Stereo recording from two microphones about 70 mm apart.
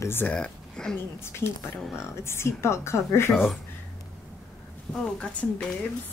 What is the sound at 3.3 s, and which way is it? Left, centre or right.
Speech, centre.